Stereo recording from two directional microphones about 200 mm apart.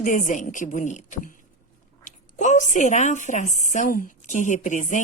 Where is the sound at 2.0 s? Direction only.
40° left (ahead or behind).